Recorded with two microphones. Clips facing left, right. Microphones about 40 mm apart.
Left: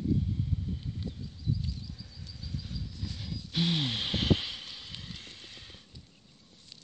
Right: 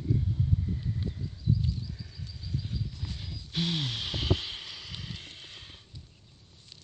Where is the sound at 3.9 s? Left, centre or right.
Left.